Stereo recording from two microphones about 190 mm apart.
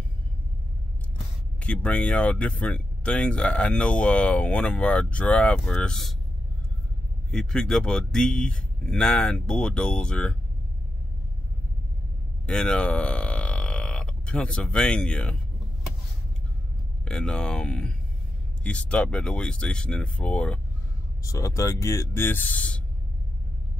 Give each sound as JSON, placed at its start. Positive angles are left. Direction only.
{"t": 1.6, "sound": "speech", "side_deg": 5}
{"t": 7.2, "sound": "a man's voice", "side_deg": 5}
{"t": 12.4, "sound": "speech", "side_deg": 5}
{"t": 17.0, "sound": "a man's voice", "side_deg": 5}
{"t": 21.2, "sound": "speech", "side_deg": 15}